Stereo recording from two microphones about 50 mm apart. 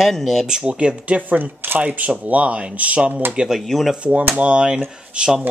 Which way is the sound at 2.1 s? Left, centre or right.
Right.